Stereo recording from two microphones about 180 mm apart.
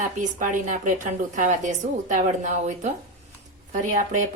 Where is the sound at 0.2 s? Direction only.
45° right (ahead or behind).